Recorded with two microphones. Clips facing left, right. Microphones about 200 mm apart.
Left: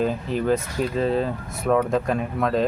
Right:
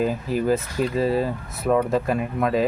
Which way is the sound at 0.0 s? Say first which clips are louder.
Right 1 dB; 5° right (ahead or behind).